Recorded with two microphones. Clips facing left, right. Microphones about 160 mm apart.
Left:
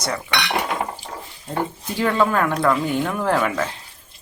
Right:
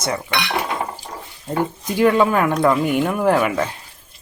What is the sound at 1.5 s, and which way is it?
Speech, 10° right (ahead or behind).